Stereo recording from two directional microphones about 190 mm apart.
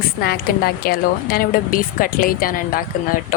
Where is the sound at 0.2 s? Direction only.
55° left (ahead or behind).